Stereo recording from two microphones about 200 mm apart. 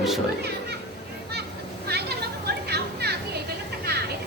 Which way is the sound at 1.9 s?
55° right (ahead or behind).